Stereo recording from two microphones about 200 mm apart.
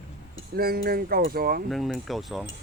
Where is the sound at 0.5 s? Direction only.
50° right (ahead or behind).